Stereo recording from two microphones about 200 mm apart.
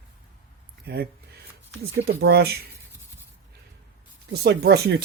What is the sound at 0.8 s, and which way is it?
Speech, 55° right (ahead or behind).